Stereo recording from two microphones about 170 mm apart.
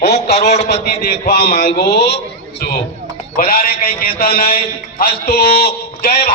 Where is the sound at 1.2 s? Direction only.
70° left (ahead or behind).